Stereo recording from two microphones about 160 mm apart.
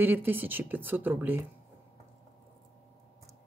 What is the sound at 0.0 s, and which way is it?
Speech, 10° right (ahead or behind).